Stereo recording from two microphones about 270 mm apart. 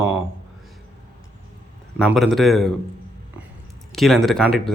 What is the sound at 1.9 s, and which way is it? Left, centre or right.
Speech, centre.